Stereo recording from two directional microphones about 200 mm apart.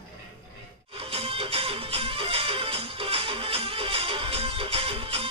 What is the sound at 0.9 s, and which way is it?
Music, 30° right (ahead or behind).